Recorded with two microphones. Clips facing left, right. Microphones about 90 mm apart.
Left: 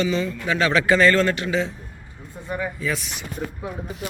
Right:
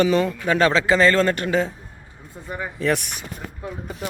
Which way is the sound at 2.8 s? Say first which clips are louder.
Right 5 dB; 60° right (ahead or behind).